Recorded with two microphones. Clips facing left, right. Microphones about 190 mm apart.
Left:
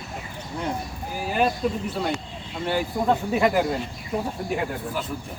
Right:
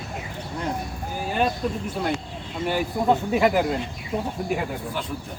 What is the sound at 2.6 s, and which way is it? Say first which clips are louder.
Speech: right 1 dB; 5° right (ahead or behind).